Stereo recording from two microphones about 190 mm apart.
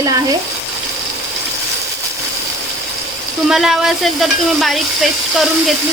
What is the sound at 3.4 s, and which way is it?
Speech, centre (ahead or behind).